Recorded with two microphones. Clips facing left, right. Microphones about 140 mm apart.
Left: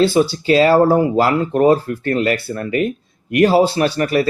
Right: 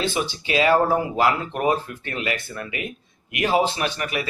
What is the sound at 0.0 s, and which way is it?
Speech, 35° left (ahead or behind).